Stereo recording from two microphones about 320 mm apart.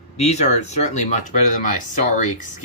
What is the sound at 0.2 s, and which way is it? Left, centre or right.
Speech, left.